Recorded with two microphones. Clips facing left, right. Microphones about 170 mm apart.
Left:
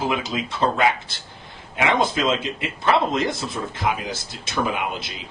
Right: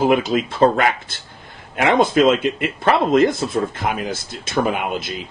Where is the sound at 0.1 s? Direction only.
55° right (ahead or behind).